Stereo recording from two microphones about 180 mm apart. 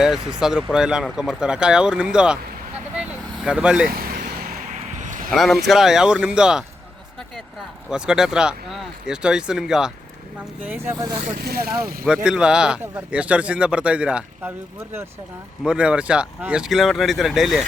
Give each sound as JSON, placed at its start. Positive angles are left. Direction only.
{"t": 0.0, "sound": "speech", "side_deg": -5}
{"t": 3.0, "sound": "vehicle", "side_deg": -5}
{"t": 4.7, "sound": "a sound", "side_deg": -45}
{"t": 5.3, "sound": "speech", "side_deg": 0}
{"t": 7.9, "sound": "speech", "side_deg": -5}
{"t": 11.3, "sound": "speech", "side_deg": -60}
{"t": 12.0, "sound": "speech", "side_deg": -5}